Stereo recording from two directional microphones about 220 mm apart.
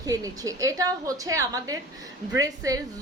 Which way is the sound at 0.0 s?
15° right (ahead or behind).